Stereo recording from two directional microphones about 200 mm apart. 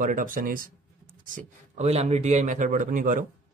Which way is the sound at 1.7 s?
30° right (ahead or behind).